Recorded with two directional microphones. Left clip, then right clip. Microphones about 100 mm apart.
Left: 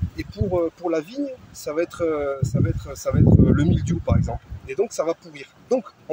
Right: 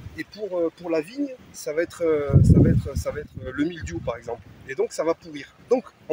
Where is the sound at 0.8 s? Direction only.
35° right (ahead or behind).